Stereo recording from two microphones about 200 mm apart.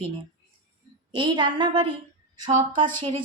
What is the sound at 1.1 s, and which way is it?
A woman's voice, 25° right (ahead or behind).